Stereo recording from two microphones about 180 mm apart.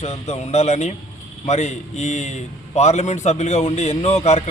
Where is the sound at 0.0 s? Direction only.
35° left (ahead or behind).